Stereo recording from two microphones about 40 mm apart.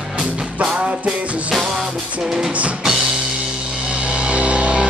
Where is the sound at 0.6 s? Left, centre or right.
Right.